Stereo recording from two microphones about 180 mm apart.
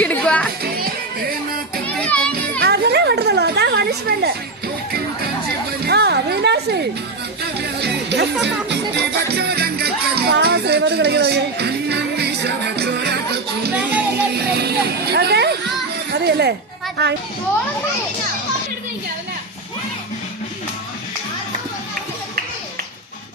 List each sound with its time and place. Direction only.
0.0 s music: 5° left (ahead or behind)
0.6 s music: 55° right (ahead or behind)
1.9 s children playing: 5° left (ahead or behind)
2.6 s a sound: 65° right (ahead or behind)
5.8 s chatter: 65° right (ahead or behind)
7.8 s music: 65° right (ahead or behind)
9.3 s music: 65° right (ahead or behind)
16.1 s a sound: 65° right (ahead or behind)
17.0 s a child's voice: 65° right (ahead or behind)